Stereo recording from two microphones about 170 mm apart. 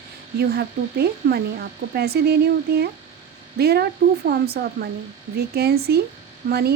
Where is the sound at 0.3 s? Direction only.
70° right (ahead or behind).